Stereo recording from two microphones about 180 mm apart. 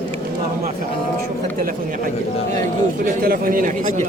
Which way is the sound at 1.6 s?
55° right (ahead or behind).